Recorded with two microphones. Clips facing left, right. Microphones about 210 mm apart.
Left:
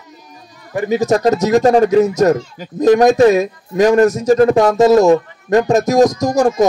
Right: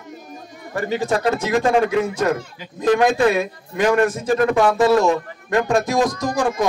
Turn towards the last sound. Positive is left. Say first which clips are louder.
# left 7 dB
turn(degrees=40)  # may be behind; listen again after turning